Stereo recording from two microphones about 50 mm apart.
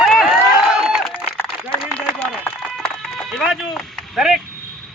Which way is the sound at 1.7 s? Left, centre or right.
Left.